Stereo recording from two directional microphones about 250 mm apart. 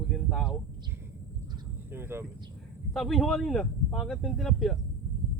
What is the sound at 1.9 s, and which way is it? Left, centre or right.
Speech, centre.